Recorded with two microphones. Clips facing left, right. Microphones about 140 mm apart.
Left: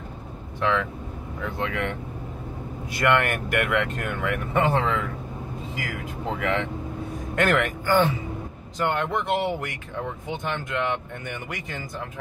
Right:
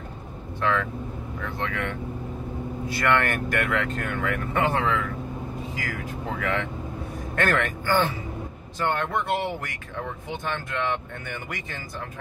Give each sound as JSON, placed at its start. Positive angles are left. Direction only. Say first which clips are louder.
{"t": 0.6, "sound": "speech", "louder": "left 1 dB", "side_deg": 20}
{"t": 3.0, "sound": "speech", "louder": "left 2 dB", "side_deg": 15}